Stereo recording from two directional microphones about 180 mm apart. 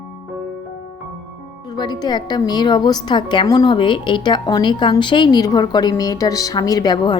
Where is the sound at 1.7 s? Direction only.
25° left (ahead or behind).